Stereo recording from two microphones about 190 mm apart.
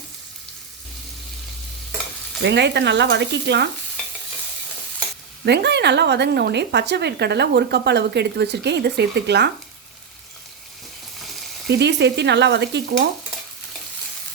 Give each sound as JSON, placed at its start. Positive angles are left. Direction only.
{"t": 2.4, "sound": "a woman's voice", "side_deg": -65}
{"t": 5.5, "sound": "a woman's voice", "side_deg": -65}
{"t": 11.7, "sound": "a woman's voice", "side_deg": -65}